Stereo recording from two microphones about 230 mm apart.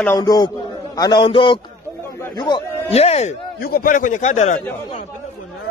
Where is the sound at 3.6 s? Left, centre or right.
Left.